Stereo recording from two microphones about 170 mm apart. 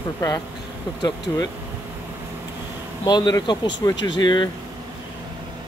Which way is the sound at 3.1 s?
25° left (ahead or behind).